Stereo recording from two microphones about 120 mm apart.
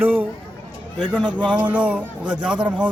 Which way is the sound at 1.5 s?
10° right (ahead or behind).